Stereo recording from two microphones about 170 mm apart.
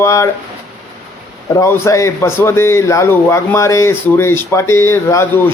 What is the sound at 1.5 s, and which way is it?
A man's voice, 15° left (ahead or behind).